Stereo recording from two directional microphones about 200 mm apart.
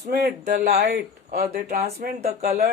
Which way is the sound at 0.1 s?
55° right (ahead or behind).